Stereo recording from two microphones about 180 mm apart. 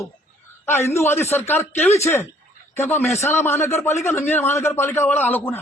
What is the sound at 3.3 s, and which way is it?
A man's voice, 15° left (ahead or behind).